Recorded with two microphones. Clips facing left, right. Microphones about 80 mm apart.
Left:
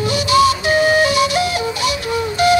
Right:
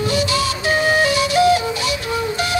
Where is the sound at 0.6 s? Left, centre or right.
Centre.